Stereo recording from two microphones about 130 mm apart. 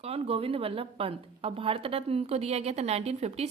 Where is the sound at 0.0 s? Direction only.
50° right (ahead or behind).